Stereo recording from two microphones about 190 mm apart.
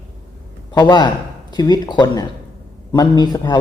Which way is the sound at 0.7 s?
20° left (ahead or behind).